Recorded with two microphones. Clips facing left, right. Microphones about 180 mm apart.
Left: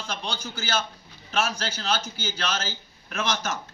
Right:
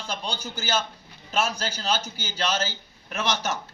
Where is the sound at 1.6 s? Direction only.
15° right (ahead or behind).